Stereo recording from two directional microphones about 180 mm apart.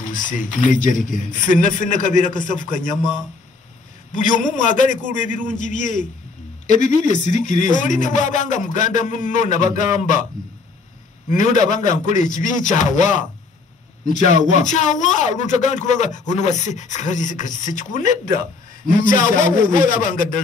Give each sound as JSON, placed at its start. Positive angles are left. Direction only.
{"t": 0.1, "sound": "speech", "side_deg": 45}
{"t": 4.1, "sound": "speech", "side_deg": 45}
{"t": 11.2, "sound": "speech", "side_deg": 45}